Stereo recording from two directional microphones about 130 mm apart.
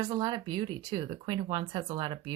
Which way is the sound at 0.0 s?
30° right (ahead or behind).